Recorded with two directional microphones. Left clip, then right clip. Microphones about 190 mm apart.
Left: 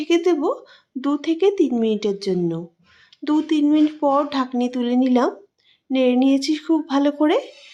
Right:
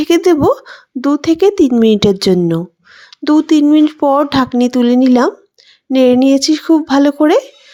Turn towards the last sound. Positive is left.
turn(degrees=-35)  # may be behind; listen again after turning